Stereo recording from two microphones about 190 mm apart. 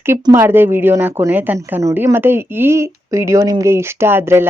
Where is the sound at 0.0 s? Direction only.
15° right (ahead or behind).